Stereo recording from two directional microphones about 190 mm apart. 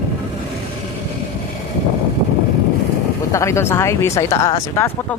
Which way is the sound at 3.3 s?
15° left (ahead or behind).